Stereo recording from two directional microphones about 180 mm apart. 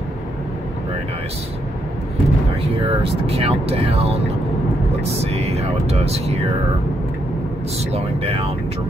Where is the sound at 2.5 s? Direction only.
35° right (ahead or behind).